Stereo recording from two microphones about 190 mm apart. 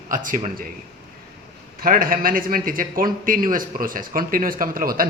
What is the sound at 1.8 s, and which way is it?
Speech, 50° right (ahead or behind).